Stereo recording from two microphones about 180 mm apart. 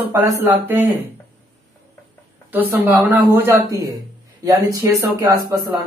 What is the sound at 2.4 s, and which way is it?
Speech, 10° right (ahead or behind).